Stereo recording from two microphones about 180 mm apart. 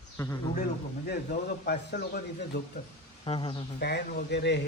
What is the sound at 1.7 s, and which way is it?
Speech, 60° left (ahead or behind).